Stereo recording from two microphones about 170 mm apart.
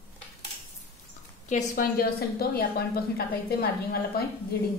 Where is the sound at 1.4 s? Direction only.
45° left (ahead or behind).